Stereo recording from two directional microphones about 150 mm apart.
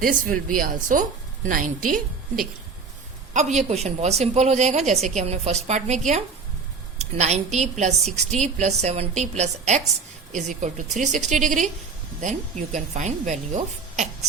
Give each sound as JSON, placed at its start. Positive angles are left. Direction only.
{"t": 0.0, "sound": "speech", "side_deg": -65}
{"t": 3.3, "sound": "a woman's voice", "side_deg": -50}
{"t": 7.0, "sound": "a woman's voice", "side_deg": -45}